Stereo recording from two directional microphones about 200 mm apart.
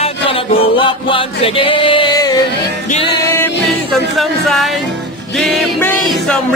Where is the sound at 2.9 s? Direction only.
25° left (ahead or behind).